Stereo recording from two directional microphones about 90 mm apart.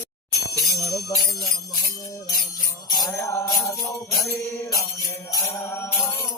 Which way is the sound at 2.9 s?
40° left (ahead or behind).